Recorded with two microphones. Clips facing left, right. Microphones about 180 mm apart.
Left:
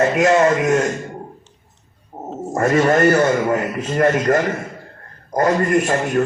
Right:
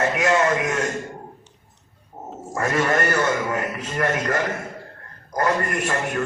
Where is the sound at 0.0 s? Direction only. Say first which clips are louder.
Left 6 dB; 45° left (ahead or behind).